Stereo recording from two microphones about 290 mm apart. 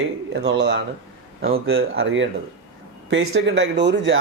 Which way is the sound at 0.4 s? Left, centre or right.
Right.